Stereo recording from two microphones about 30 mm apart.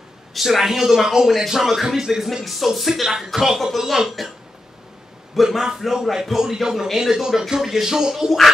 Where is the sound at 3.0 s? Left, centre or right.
Centre.